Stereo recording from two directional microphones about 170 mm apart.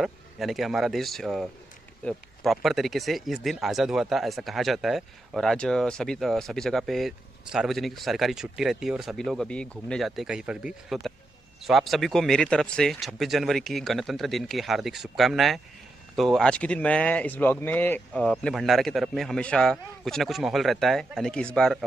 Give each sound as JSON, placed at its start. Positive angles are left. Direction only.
{"t": 0.0, "sound": "speech", "side_deg": 0}